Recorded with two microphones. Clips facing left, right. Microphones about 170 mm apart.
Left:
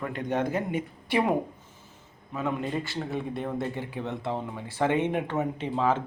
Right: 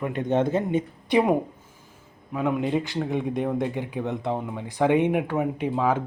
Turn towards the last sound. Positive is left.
turn(degrees=-10)  # may be behind; listen again after turning